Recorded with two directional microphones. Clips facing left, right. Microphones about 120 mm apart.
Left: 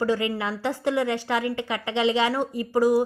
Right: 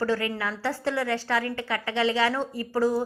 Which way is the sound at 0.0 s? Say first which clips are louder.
Left 2 dB; 15° left (ahead or behind).